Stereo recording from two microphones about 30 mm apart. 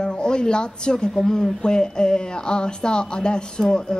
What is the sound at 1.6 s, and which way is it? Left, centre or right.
Speech, left.